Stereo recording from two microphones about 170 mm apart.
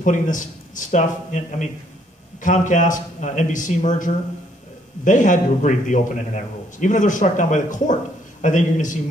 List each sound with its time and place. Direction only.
0.0 s a man's voice: 50° left (ahead or behind)